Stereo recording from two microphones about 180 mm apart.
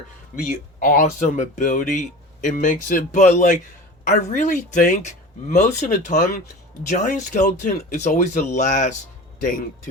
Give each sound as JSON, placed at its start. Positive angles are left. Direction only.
{"t": 0.4, "sound": "speech", "side_deg": 45}